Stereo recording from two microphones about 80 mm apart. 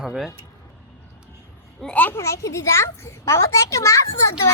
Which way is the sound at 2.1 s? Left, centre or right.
Left.